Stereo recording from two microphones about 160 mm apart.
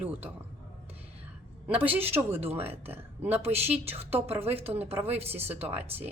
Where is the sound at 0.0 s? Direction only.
10° right (ahead or behind).